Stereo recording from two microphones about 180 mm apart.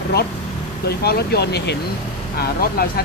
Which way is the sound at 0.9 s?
60° left (ahead or behind).